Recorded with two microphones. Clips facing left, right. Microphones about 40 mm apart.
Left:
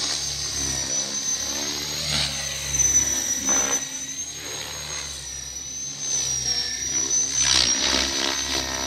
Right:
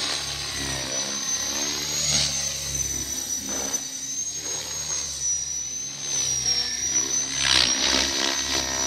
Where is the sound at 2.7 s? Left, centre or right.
Left.